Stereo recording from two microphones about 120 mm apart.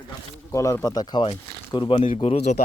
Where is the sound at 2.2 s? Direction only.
70° left (ahead or behind).